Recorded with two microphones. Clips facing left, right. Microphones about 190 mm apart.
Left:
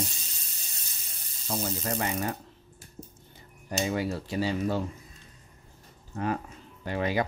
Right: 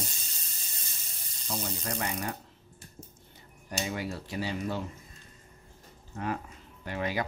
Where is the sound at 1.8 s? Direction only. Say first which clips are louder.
Left 4 dB; 25° left (ahead or behind).